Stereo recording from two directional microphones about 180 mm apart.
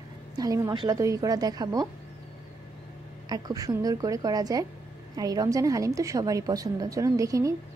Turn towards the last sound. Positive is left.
turn(degrees=-15)  # may be behind; listen again after turning